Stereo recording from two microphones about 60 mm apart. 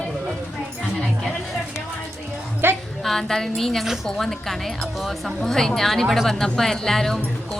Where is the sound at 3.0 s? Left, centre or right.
Centre.